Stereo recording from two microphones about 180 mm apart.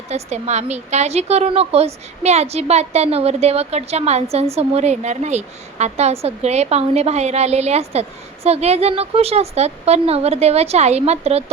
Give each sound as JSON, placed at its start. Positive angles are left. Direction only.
{"t": 0.1, "sound": "a woman's voice", "side_deg": -40}